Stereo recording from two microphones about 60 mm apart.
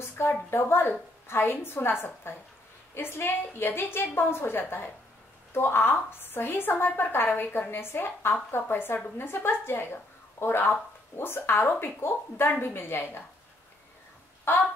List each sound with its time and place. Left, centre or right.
0.0 s a woman's voice: left
14.5 s a woman's voice: left